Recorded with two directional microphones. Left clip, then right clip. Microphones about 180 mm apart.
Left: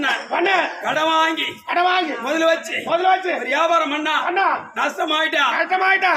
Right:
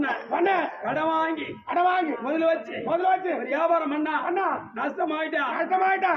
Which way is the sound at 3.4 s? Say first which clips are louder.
Left 7 dB; 15° left (ahead or behind).